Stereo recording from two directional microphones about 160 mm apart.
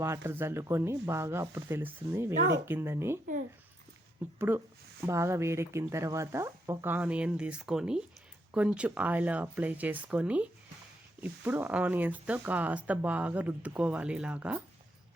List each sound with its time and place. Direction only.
0.0 s speech: 15° right (ahead or behind)
4.4 s speech: 15° right (ahead or behind)